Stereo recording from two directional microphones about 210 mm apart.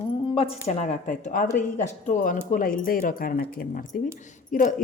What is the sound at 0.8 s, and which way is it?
Speech, 35° left (ahead or behind).